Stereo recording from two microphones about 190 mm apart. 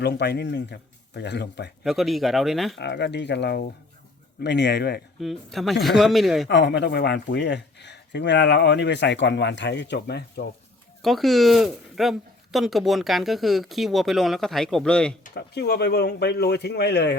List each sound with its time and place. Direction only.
0.0 s speech: 60° left (ahead or behind)
1.8 s speech: centre (ahead or behind)
2.7 s speech: 65° left (ahead or behind)
5.2 s speech: centre (ahead or behind)
6.5 s speech: 65° left (ahead or behind)
11.0 s speech: centre (ahead or behind)
15.2 s speech: 60° left (ahead or behind)